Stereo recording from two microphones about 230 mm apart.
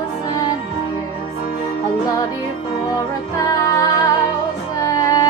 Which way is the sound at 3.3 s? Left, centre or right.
Centre.